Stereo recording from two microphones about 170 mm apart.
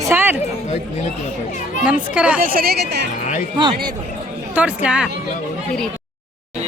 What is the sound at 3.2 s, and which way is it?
Speech, 50° left (ahead or behind).